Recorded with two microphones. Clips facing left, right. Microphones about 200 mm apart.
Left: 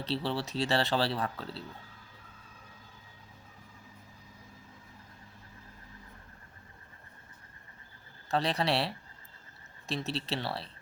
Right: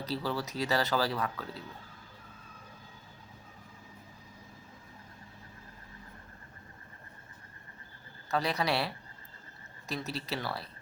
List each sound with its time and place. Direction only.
0.0 s speech: 30° left (ahead or behind)
8.3 s speech: 30° left (ahead or behind)